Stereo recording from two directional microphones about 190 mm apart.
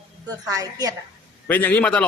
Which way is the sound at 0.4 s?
20° right (ahead or behind).